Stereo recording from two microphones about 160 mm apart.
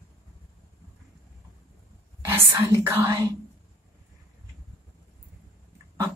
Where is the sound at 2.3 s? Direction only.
15° right (ahead or behind).